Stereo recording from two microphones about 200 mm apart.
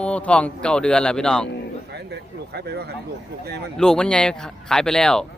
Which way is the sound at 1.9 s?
55° right (ahead or behind).